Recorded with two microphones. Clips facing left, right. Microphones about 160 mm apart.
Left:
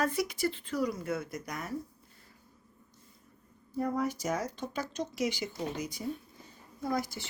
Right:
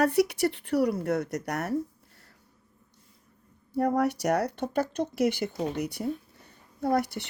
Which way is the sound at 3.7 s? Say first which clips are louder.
Right 6 dB; 70° right (ahead or behind).